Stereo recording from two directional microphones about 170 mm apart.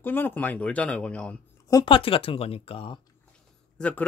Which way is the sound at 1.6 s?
25° left (ahead or behind).